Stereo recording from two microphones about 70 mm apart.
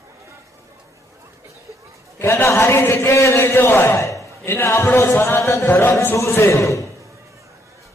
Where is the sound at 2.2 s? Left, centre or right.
Left.